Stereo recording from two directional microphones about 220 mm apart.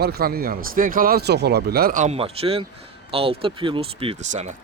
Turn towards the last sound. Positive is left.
turn(degrees=-35)  # may be behind; listen again after turning